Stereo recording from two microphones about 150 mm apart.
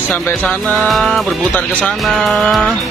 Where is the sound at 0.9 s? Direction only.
Centre (ahead or behind).